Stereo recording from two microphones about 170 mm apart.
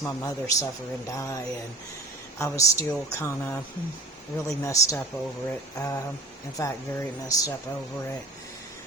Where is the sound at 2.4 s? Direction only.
20° left (ahead or behind).